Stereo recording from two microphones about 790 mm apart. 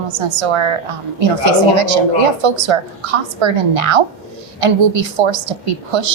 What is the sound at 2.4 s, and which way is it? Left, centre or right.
A woman's voice, right.